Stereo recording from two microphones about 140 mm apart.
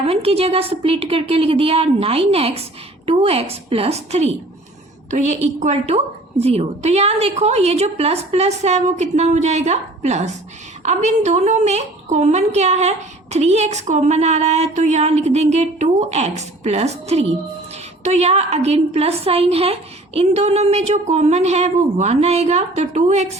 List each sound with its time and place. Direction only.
0.0 s a woman's voice: 45° right (ahead or behind)